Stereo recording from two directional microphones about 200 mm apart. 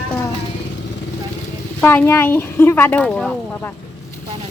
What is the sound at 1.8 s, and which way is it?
Speech, 10° left (ahead or behind).